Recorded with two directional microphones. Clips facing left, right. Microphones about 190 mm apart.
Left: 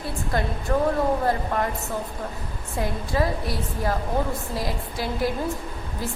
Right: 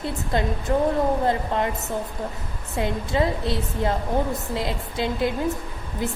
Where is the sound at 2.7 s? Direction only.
20° right (ahead or behind).